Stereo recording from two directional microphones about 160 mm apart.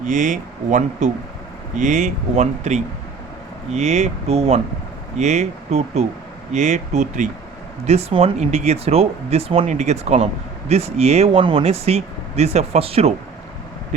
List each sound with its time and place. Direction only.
0.0 s speech: 50° right (ahead or behind)